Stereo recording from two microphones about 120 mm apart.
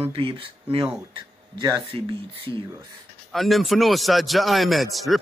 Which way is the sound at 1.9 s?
50° right (ahead or behind).